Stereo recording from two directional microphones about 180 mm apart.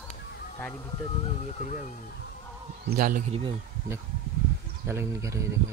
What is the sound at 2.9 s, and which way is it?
Speech, 55° right (ahead or behind).